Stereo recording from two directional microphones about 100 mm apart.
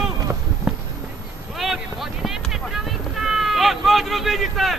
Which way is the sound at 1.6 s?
Centre (ahead or behind).